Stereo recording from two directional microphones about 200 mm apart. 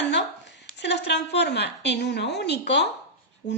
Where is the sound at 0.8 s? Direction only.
60° left (ahead or behind).